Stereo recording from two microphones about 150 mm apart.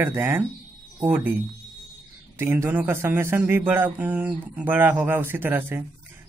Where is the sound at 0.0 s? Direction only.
15° right (ahead or behind).